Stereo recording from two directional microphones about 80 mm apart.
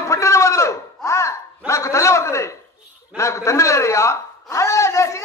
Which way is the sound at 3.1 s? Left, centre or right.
Left.